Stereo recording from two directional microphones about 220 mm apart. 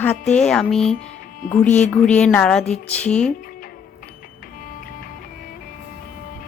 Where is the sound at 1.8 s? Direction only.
5° left (ahead or behind).